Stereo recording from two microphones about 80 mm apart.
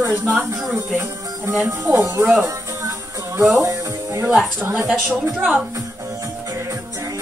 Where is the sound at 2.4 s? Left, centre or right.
Right.